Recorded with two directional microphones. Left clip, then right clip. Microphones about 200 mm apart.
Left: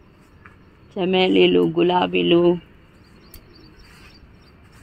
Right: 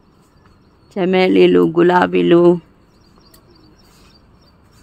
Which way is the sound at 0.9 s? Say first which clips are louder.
Right 4 dB; 35° right (ahead or behind).